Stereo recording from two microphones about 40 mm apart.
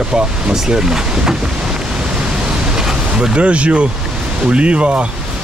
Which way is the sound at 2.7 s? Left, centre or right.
Centre.